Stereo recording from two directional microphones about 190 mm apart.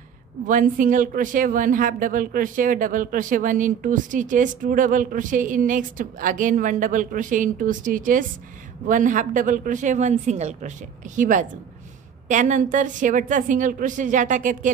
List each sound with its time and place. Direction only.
0.5 s speech: 45° right (ahead or behind)